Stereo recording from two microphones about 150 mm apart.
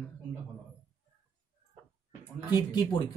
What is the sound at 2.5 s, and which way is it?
Speech, 30° left (ahead or behind).